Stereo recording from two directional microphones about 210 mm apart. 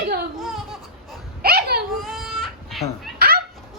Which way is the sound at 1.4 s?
45° right (ahead or behind).